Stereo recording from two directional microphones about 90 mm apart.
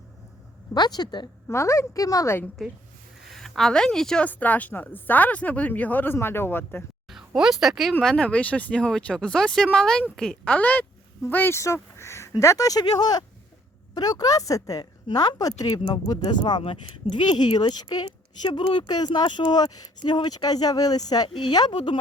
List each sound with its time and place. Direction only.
0.7 s speech: 50° left (ahead or behind)
1.5 s speech: 30° left (ahead or behind)
2.6 s a woman's voice: centre (ahead or behind)
4.3 s speech: 15° left (ahead or behind)
7.1 s speech: 5° right (ahead or behind)
8.0 s a woman's voice: 10° left (ahead or behind)
11.6 s a sound: 30° left (ahead or behind)
12.4 s speech: 35° left (ahead or behind)
16.4 s speech: 70° left (ahead or behind)
17.2 s speech: 55° left (ahead or behind)
18.4 s speech: 65° left (ahead or behind)